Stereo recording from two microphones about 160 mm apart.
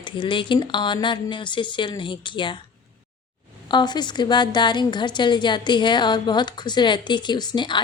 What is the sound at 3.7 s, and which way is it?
A woman's voice, 25° left (ahead or behind).